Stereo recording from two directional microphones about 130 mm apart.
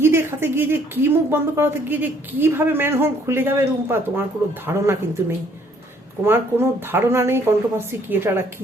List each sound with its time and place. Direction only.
0.0 s speech: 20° right (ahead or behind)
6.2 s speech: 15° right (ahead or behind)